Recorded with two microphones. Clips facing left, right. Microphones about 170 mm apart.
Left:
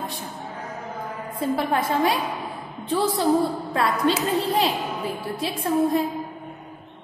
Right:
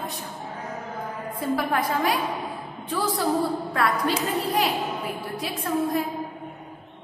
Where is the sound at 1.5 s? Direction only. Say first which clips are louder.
Left 2 dB; 25° left (ahead or behind).